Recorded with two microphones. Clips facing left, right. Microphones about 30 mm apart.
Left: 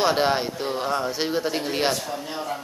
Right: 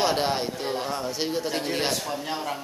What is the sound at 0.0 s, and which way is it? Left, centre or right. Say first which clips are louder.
Speech: left 3 dB; centre.